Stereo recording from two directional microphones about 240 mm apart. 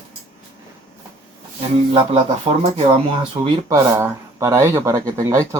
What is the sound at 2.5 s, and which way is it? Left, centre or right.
Speech, right.